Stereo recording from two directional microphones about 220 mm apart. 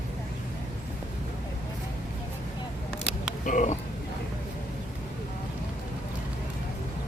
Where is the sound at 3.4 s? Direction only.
35° left (ahead or behind).